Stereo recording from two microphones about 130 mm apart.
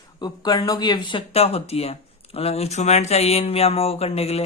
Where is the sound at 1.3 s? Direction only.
50° left (ahead or behind).